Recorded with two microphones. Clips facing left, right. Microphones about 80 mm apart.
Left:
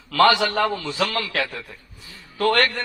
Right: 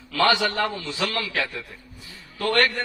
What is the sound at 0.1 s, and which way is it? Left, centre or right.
Speech, left.